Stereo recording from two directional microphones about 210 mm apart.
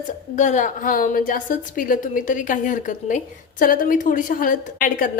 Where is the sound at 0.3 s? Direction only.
35° left (ahead or behind).